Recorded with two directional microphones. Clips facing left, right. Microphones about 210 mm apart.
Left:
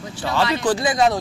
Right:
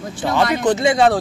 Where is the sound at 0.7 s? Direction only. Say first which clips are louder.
Right 4 dB; 25° right (ahead or behind).